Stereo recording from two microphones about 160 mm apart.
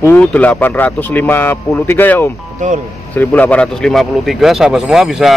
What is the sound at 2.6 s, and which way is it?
Speech, 50° right (ahead or behind).